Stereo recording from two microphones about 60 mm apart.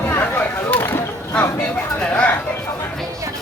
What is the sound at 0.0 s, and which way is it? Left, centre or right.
Chop, left.